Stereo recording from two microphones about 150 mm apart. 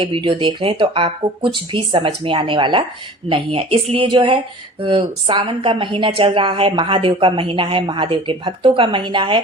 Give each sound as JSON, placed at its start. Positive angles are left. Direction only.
{"t": 0.0, "sound": "speech", "side_deg": -35}